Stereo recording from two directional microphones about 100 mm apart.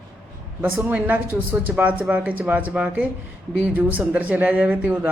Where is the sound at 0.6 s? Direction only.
20° right (ahead or behind).